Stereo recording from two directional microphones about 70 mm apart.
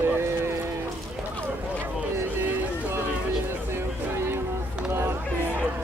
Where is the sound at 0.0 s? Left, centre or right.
Right.